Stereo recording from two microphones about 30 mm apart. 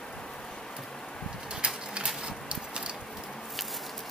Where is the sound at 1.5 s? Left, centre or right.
Right.